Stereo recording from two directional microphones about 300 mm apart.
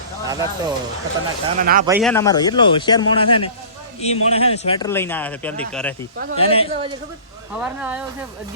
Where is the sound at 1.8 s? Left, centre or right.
Centre.